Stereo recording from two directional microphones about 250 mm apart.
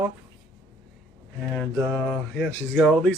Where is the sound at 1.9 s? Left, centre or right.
Centre.